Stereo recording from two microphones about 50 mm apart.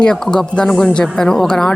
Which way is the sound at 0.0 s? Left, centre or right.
Centre.